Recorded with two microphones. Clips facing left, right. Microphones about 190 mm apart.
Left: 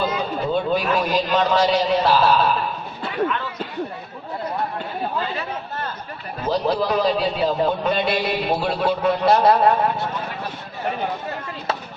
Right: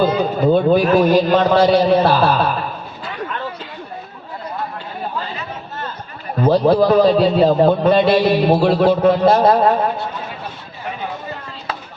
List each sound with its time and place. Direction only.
0.0 s a sound: 35° right (ahead or behind)
0.5 s a man's voice: 50° right (ahead or behind)
6.5 s a man's voice: 50° right (ahead or behind)